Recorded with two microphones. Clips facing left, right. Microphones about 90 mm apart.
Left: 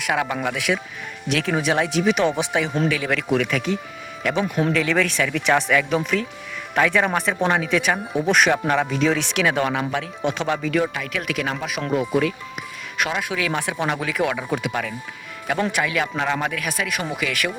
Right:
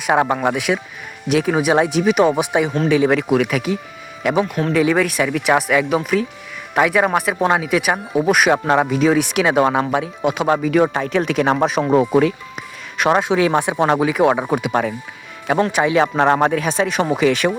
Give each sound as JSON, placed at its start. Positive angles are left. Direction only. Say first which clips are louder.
{"t": 0.0, "sound": "speech", "louder": "right 7 dB", "side_deg": -30}
{"t": 8.5, "sound": "speech", "louder": "right 5 dB", "side_deg": -25}
{"t": 8.9, "sound": "speech", "louder": "right 5 dB", "side_deg": -10}
{"t": 10.8, "sound": "speech", "louder": "right 8 dB", "side_deg": -35}
{"t": 16.1, "sound": "speech", "louder": "right 9 dB", "side_deg": -40}